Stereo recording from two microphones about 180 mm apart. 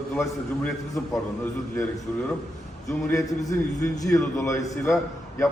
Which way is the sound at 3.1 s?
15° left (ahead or behind).